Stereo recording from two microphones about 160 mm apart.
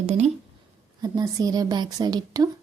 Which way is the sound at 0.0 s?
45° right (ahead or behind).